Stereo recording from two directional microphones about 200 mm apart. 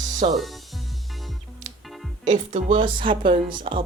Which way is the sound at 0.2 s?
30° right (ahead or behind).